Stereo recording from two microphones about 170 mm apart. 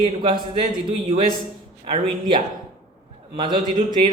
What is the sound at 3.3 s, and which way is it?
Speech, 30° right (ahead or behind).